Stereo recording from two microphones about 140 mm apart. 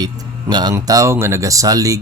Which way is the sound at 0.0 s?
30° right (ahead or behind).